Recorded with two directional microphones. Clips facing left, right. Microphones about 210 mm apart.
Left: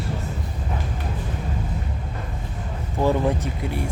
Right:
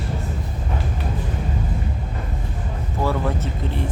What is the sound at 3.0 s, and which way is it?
Vehicle, 15° left (ahead or behind).